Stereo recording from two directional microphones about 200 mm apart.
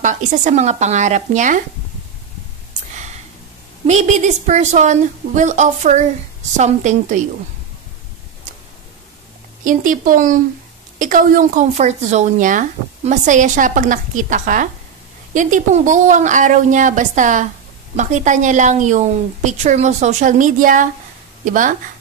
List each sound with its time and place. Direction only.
0.0 s a woman's voice: 40° right (ahead or behind)
3.8 s a woman's voice: 35° right (ahead or behind)
9.7 s a woman's voice: 40° right (ahead or behind)